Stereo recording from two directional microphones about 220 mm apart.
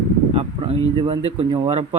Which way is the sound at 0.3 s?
25° right (ahead or behind).